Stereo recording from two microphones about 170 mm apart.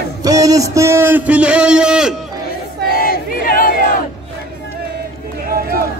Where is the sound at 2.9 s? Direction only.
60° left (ahead or behind).